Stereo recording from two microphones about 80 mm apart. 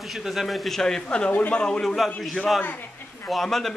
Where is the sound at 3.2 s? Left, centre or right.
Centre.